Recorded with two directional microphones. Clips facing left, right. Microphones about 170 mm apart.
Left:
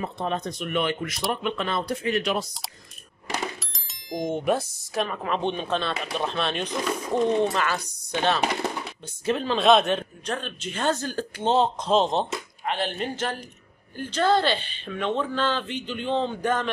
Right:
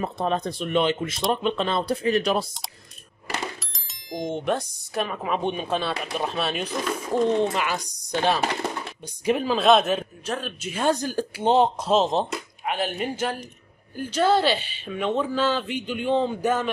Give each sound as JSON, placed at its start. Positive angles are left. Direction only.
{"t": 0.0, "sound": "speech", "side_deg": -35}
{"t": 3.5, "sound": "speech", "side_deg": 0}
{"t": 7.4, "sound": "a man's voice", "side_deg": -15}
{"t": 11.9, "sound": "a man's voice", "side_deg": 0}